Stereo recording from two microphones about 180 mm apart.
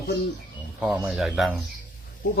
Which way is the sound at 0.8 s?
5° right (ahead or behind).